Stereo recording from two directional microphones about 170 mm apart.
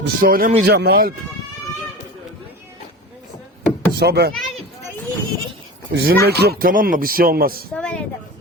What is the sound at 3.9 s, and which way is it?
Speech, 75° right (ahead or behind).